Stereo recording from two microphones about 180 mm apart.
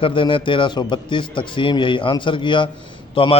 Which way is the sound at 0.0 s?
30° left (ahead or behind).